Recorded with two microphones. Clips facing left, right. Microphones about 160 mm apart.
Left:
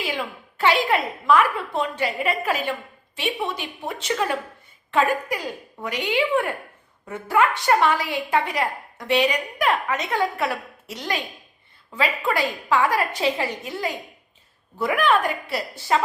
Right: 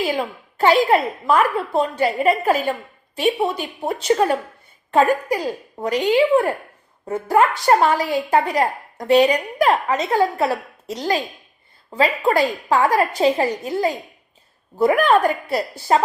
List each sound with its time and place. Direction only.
0.0 s a woman's voice: 40° right (ahead or behind)